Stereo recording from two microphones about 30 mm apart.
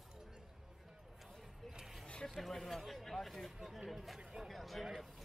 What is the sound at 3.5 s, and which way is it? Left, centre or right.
Speech, centre.